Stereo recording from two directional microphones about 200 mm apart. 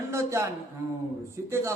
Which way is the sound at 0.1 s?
15° right (ahead or behind).